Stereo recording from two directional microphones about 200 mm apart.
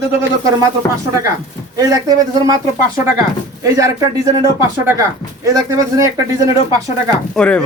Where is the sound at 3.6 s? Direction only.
15° right (ahead or behind).